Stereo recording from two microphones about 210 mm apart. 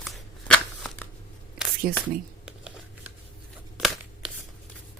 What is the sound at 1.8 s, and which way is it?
Speech, 45° right (ahead or behind).